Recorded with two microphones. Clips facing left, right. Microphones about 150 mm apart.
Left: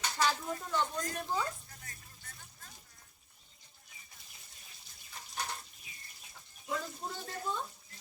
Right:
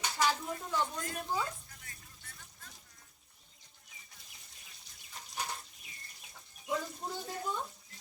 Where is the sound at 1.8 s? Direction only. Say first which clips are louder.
Left 2 dB; 45° left (ahead or behind).